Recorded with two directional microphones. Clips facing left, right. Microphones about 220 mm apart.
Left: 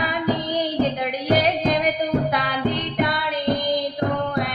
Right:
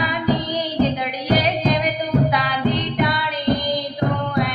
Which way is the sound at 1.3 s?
50° left (ahead or behind).